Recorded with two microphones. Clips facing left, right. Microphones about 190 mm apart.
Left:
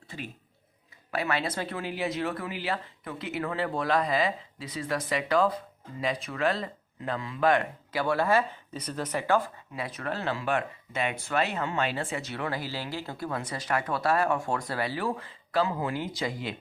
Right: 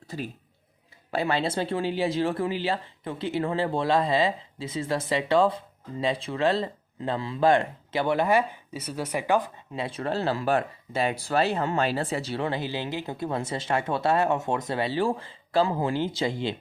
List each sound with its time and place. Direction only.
0.1 s speech: 40° right (ahead or behind)